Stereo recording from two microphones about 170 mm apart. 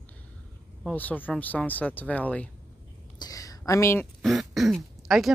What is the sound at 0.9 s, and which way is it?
Speech, 10° left (ahead or behind).